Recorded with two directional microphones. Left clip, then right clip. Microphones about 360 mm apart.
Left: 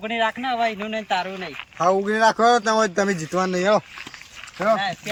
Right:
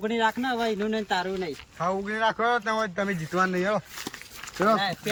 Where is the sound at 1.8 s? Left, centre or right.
Left.